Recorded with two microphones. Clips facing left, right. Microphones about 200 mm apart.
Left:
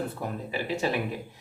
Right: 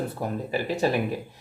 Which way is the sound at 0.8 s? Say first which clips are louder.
Right 5 dB; 40° right (ahead or behind).